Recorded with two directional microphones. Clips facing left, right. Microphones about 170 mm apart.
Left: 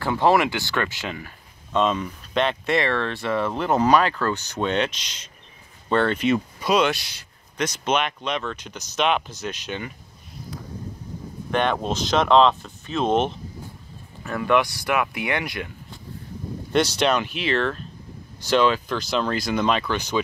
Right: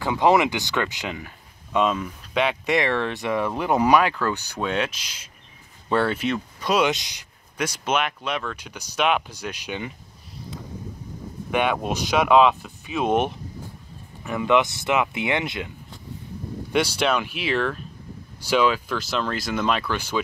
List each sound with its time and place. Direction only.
0.0 s speech: 15° right (ahead or behind)
6.9 s speech: 15° right (ahead or behind)
11.5 s speech: 10° right (ahead or behind)
16.7 s speech: 10° right (ahead or behind)